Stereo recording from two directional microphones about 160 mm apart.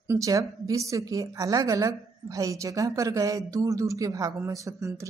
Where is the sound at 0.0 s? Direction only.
20° right (ahead or behind).